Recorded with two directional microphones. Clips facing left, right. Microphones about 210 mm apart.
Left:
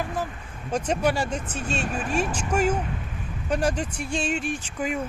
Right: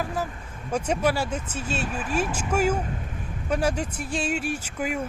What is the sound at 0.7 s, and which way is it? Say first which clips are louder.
Speech: even; 10° right (ahead or behind).